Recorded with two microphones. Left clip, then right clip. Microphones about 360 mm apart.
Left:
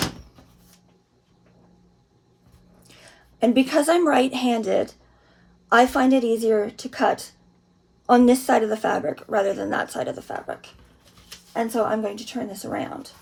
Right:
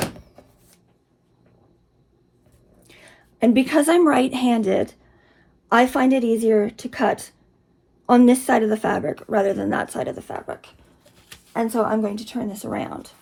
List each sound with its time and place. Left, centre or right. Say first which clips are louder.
2.8 s a woman's voice: right 1 dB; centre
11.5 s a woman's voice: right 1 dB; right
12.5 s a woman's voice: right 1 dB; centre